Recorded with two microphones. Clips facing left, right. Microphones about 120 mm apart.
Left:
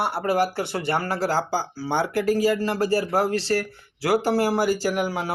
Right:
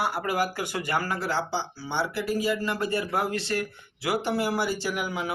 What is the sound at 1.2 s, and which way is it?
Speech, 40° left (ahead or behind).